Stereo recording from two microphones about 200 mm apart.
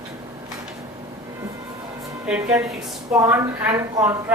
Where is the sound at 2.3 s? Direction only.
5° right (ahead or behind).